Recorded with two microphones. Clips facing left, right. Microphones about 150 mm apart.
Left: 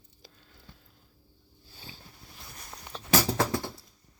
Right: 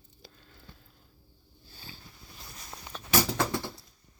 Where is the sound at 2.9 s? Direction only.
25° left (ahead or behind).